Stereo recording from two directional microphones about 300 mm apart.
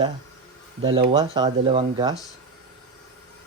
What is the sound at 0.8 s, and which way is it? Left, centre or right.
Speech, centre.